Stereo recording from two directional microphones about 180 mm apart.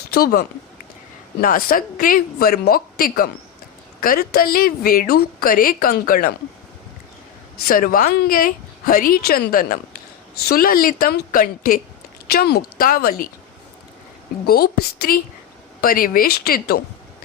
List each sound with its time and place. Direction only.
0.1 s a woman's voice: 60° left (ahead or behind)
7.7 s a woman's voice: 50° left (ahead or behind)
14.4 s a woman's voice: 60° left (ahead or behind)